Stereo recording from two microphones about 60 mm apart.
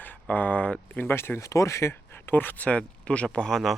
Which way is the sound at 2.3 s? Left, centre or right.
Left.